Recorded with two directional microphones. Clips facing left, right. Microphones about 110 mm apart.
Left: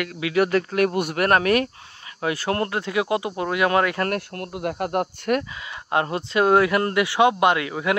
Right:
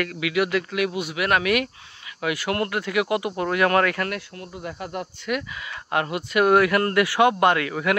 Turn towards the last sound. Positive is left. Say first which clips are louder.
# even
turn(degrees=20)  # may be behind; listen again after turning